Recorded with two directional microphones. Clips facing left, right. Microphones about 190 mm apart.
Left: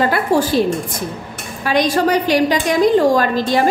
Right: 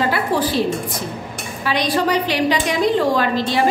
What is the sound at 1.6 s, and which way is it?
A woman's voice, 45° left (ahead or behind).